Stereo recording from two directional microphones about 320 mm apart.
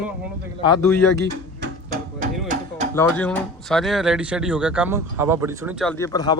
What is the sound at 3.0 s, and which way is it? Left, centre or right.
Speech, centre.